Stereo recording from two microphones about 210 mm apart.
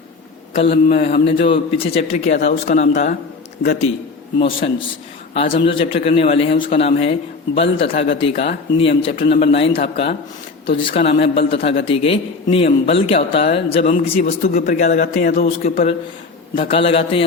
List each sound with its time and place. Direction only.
0.5 s a man's voice: 25° left (ahead or behind)
4.4 s a man's voice: 25° left (ahead or behind); by 15.9 s 40° left (ahead or behind)
16.6 s a man's voice: 25° left (ahead or behind)